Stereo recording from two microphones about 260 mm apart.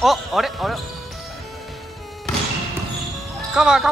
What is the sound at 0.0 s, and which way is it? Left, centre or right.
Speech, centre.